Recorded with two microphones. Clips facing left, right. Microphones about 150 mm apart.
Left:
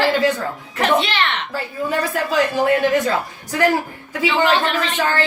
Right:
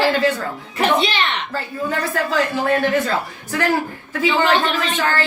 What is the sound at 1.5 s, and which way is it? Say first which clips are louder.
Speech: left 1 dB; 15° left (ahead or behind).